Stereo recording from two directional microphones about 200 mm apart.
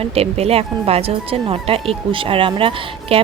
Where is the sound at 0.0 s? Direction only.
30° right (ahead or behind).